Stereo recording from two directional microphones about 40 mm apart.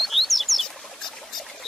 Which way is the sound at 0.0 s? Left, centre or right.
Centre.